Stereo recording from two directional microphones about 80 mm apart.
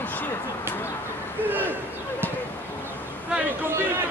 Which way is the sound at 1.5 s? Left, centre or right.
Right.